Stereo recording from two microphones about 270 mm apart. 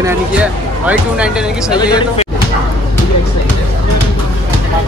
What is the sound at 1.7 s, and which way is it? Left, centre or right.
Speech, centre.